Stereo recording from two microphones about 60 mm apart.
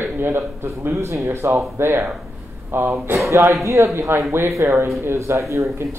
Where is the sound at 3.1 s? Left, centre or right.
Right.